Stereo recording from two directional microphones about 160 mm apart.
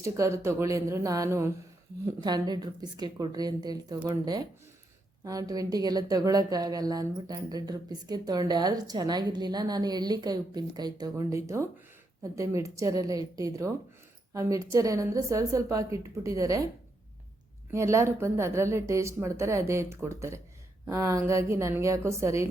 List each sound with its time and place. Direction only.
0.0 s a woman's voice: 20° right (ahead or behind)
17.7 s a woman's voice: 20° right (ahead or behind)